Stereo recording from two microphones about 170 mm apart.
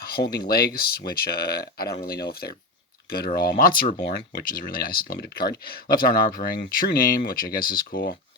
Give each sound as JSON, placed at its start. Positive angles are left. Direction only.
{"t": 0.0, "sound": "speech", "side_deg": 65}